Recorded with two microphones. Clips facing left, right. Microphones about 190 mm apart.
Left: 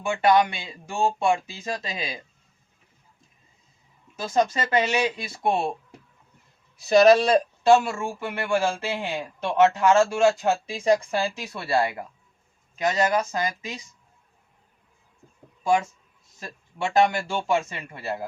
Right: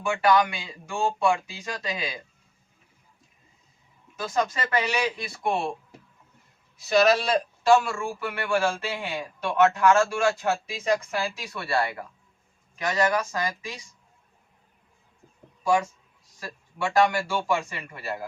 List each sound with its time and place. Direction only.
0.0 s speech: 25° left (ahead or behind)
4.2 s speech: 25° left (ahead or behind)
6.8 s speech: 30° left (ahead or behind)
16.4 s speech: 25° left (ahead or behind)